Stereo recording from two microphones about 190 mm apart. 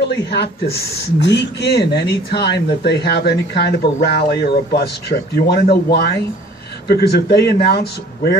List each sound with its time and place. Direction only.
0.3 s speech: 60° left (ahead or behind)